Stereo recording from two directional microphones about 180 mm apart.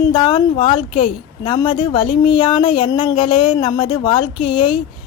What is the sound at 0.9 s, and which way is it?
Speech, 45° left (ahead or behind).